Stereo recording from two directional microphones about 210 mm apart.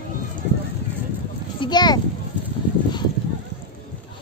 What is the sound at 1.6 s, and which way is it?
Speech, 20° left (ahead or behind).